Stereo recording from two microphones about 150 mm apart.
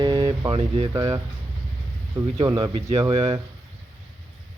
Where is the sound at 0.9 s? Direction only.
20° right (ahead or behind); by 3.4 s 35° right (ahead or behind).